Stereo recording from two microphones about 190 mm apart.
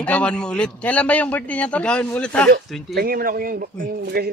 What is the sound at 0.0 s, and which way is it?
A man's voice, 5° left (ahead or behind).